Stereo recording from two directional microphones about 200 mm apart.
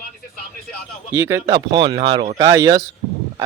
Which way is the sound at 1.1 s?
15° right (ahead or behind).